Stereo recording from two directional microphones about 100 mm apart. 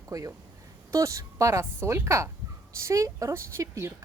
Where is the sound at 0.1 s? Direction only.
35° right (ahead or behind).